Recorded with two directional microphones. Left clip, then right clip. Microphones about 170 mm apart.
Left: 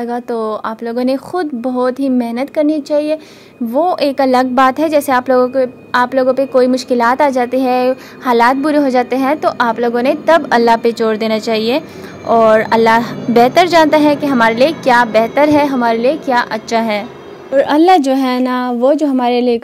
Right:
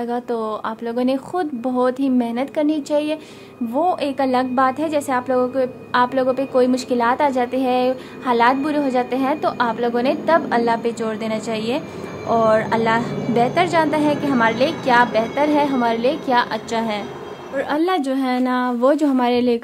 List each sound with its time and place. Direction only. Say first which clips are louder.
0.0 s speech: left 5 dB; 25° left (ahead or behind)
3.7 s a woman's voice: left 6 dB; 30° left (ahead or behind)
5.6 s a woman's voice: left 5 dB; 25° left (ahead or behind)
18.8 s speech: left 5 dB; 20° left (ahead or behind)